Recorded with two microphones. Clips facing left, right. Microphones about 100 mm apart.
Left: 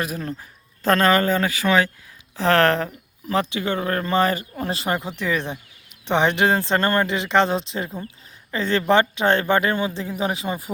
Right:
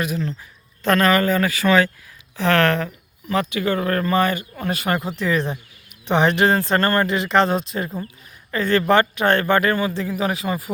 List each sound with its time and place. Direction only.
0.0 s speech: 40° left (ahead or behind)
0.9 s speech: 30° left (ahead or behind)
2.3 s speech: 35° left (ahead or behind)